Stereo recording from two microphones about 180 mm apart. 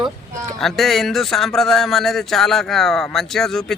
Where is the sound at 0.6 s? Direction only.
Centre (ahead or behind).